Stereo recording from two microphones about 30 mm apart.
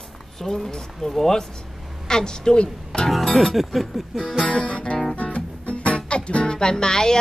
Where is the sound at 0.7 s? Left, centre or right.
Left.